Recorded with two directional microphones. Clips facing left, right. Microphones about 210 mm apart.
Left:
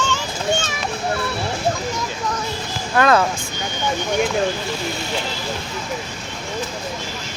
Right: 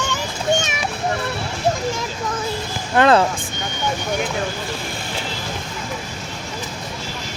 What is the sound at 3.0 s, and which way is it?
Speech, 25° right (ahead or behind).